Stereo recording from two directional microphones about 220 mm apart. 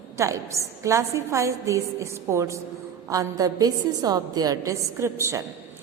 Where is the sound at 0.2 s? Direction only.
15° right (ahead or behind).